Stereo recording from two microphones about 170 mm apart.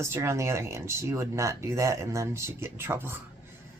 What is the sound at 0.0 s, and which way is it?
Speech, 15° right (ahead or behind).